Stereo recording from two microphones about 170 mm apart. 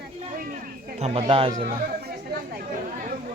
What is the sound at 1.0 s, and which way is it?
Speech, 35° right (ahead or behind).